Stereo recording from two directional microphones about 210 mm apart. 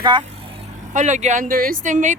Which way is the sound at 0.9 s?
35° right (ahead or behind).